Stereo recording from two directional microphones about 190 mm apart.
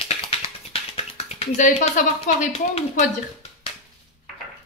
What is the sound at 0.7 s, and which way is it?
Speech, 30° left (ahead or behind).